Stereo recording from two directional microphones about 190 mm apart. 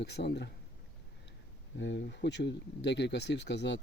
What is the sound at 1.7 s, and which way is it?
Speech, 70° left (ahead or behind).